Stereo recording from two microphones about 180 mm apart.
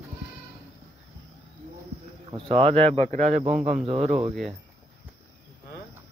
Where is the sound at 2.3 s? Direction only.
30° right (ahead or behind).